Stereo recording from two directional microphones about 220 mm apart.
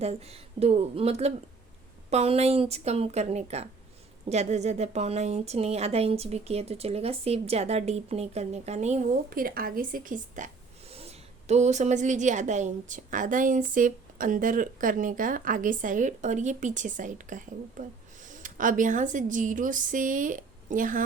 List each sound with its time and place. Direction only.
0.0 s a woman's voice: 30° right (ahead or behind)